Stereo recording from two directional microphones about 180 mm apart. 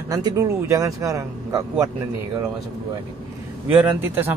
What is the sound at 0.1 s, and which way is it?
Speech, 20° right (ahead or behind).